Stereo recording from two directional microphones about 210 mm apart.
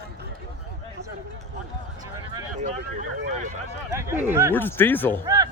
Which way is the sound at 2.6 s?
35° right (ahead or behind).